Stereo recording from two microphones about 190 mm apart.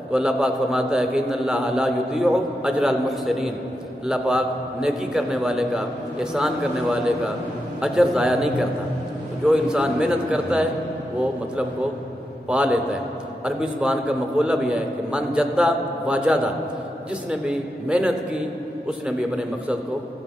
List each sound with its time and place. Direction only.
0.1 s a man's voice: 5° right (ahead or behind)
12.4 s a man's voice: 5° right (ahead or behind)